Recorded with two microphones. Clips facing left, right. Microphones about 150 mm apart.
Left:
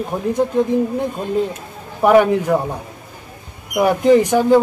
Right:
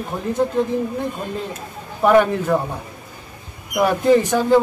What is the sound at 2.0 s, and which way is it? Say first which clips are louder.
Speech: left 2 dB; 15° left (ahead or behind).